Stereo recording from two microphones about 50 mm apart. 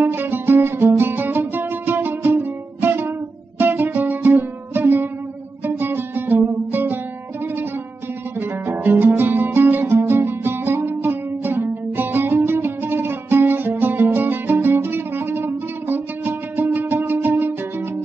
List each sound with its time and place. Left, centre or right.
0.0 s music: right
8.4 s music: right